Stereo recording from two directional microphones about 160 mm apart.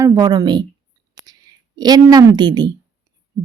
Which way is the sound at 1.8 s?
25° right (ahead or behind).